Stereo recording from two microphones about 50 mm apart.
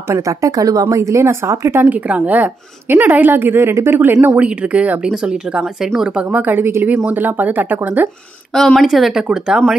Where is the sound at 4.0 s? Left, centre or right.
Right.